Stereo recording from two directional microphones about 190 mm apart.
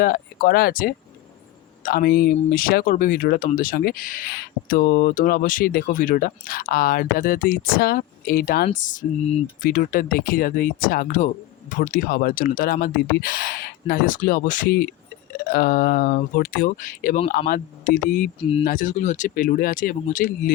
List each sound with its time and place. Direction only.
0.0 s speech: 55° left (ahead or behind)